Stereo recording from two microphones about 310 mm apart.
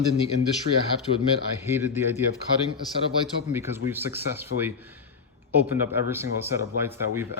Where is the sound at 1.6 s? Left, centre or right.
Centre.